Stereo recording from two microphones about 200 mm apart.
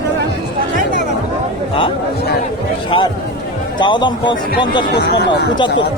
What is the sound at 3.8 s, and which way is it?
Speech, 25° left (ahead or behind).